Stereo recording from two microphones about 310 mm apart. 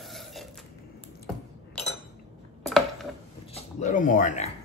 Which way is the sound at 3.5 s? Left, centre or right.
Left.